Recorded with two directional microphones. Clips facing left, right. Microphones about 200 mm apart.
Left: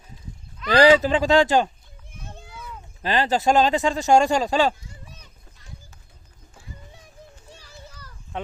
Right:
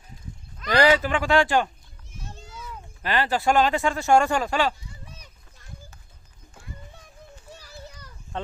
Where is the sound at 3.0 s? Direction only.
25° left (ahead or behind).